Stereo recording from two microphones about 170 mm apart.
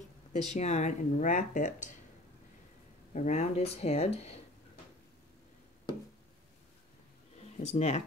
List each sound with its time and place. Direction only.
0.3 s speech: 40° left (ahead or behind)
3.1 s speech: 45° left (ahead or behind)
7.5 s speech: 40° left (ahead or behind)